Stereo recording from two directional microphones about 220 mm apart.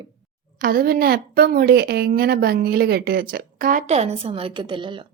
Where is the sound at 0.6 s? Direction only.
40° right (ahead or behind); by 5.0 s 20° right (ahead or behind).